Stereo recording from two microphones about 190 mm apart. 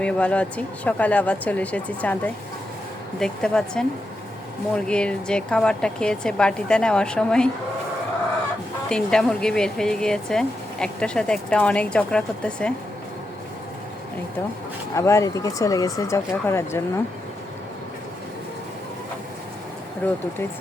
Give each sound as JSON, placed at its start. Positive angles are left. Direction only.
{"t": 0.0, "sound": "speech", "side_deg": 5}
{"t": 8.9, "sound": "speech", "side_deg": 5}
{"t": 14.9, "sound": "speech", "side_deg": 15}
{"t": 20.0, "sound": "speech", "side_deg": 10}